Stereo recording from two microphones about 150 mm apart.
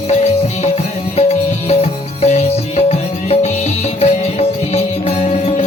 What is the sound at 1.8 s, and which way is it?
Music, 45° left (ahead or behind).